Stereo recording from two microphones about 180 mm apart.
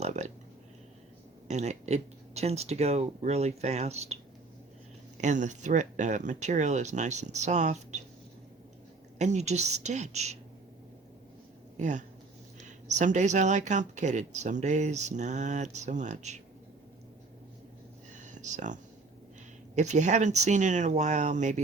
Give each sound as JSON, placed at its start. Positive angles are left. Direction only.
{"t": 0.0, "sound": "a sound", "side_deg": -40}
{"t": 1.5, "sound": "speech", "side_deg": -40}
{"t": 9.1, "sound": "speech", "side_deg": -40}
{"t": 11.8, "sound": "speech", "side_deg": -45}
{"t": 18.1, "sound": "a sound", "side_deg": -45}
{"t": 19.7, "sound": "speech", "side_deg": -40}